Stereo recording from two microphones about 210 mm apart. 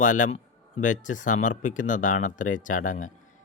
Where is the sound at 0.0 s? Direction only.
35° left (ahead or behind).